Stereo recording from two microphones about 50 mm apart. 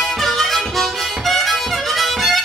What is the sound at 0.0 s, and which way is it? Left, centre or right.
Harmonica, centre.